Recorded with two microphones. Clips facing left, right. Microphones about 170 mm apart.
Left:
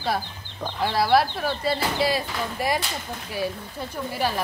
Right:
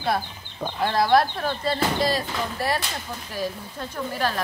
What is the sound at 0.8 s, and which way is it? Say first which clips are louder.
Speech: right 1 dB; 5° left (ahead or behind).